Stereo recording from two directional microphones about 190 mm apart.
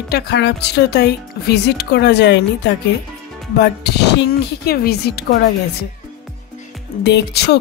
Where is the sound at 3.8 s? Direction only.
60° left (ahead or behind).